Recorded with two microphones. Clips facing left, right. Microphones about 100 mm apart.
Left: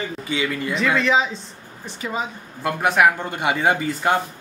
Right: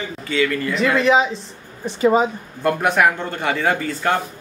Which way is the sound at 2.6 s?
Centre (ahead or behind).